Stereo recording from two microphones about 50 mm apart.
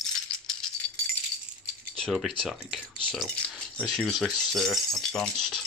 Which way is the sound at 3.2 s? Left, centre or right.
Left.